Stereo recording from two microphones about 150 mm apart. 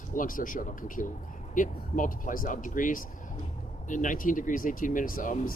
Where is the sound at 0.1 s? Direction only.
65° left (ahead or behind).